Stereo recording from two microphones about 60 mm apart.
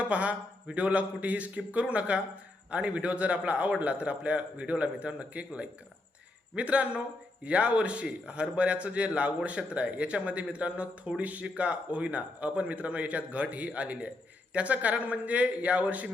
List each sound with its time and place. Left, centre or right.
0.0 s speech: right